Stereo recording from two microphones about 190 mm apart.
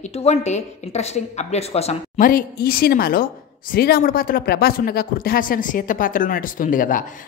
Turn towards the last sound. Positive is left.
turn(degrees=45)  # may be behind; listen again after turning